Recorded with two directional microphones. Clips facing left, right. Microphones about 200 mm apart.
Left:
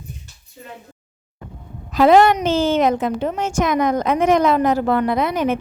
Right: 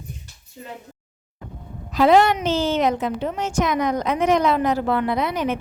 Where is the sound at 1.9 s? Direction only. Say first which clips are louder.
Left 3 dB; 50° left (ahead or behind).